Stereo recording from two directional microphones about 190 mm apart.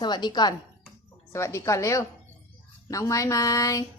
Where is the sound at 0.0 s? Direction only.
20° left (ahead or behind).